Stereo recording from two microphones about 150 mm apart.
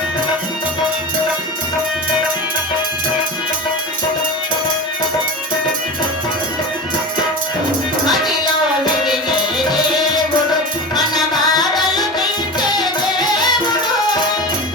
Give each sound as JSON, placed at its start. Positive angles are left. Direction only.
{"t": 10.9, "sound": "music", "side_deg": 30}